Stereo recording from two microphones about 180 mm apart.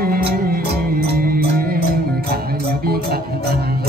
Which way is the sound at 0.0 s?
60° right (ahead or behind).